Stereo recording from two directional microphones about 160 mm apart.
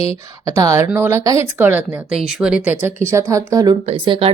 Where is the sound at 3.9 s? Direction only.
35° right (ahead or behind).